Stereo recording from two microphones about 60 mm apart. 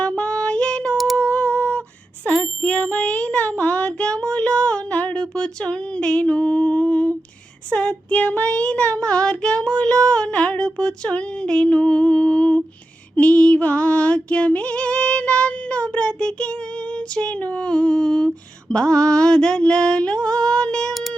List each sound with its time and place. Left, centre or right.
0.0 s female singing: centre
0.9 s humming: centre
1.2 s a sound: centre
2.3 s a sound: centre
2.6 s child singing: centre
13.1 s female singing: left
18.7 s child singing: centre